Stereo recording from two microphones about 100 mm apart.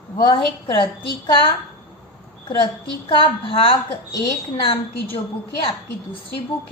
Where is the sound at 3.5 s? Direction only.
65° left (ahead or behind).